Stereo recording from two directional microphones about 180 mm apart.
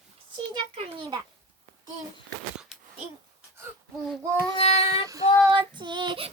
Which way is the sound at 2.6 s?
Centre (ahead or behind).